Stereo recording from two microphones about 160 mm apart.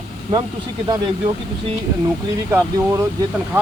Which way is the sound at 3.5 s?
15° right (ahead or behind).